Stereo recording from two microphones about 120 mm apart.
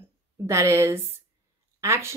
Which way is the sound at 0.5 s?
25° right (ahead or behind).